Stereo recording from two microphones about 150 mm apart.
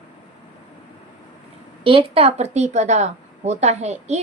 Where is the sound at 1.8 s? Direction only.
35° right (ahead or behind).